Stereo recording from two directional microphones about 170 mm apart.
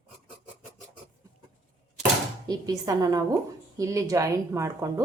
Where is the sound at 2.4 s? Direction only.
20° right (ahead or behind).